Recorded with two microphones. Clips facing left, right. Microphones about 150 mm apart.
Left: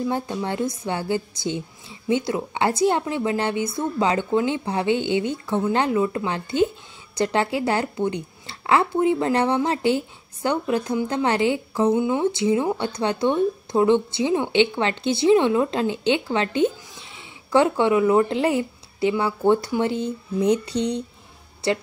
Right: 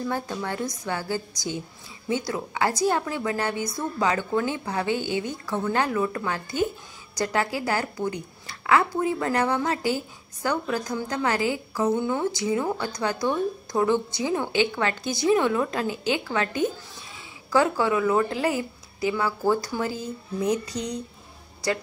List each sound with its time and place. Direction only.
0.0 s speech: 20° left (ahead or behind)